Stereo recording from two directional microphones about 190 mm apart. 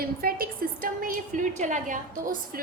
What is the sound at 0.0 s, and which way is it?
A woman's voice, 50° right (ahead or behind).